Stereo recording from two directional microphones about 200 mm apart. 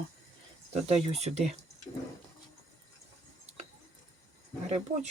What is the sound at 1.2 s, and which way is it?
Speech, 35° right (ahead or behind).